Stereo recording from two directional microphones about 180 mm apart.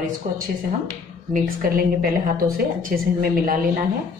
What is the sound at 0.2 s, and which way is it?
A woman's voice, 55° right (ahead or behind).